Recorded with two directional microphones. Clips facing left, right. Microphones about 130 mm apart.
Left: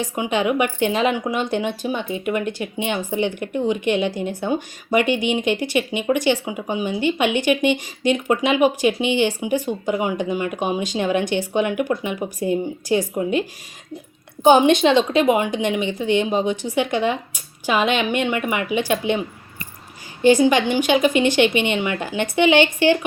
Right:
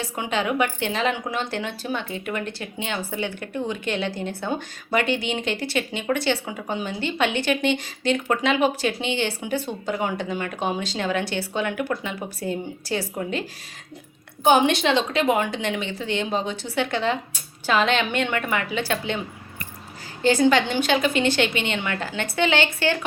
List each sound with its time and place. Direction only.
0.0 s a woman's voice: 15° left (ahead or behind)
14.4 s a woman's voice: 20° left (ahead or behind)
20.2 s a woman's voice: 15° left (ahead or behind)